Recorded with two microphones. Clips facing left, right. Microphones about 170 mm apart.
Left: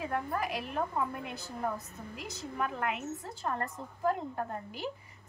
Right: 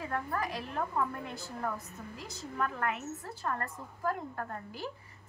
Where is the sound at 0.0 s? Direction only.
15° left (ahead or behind).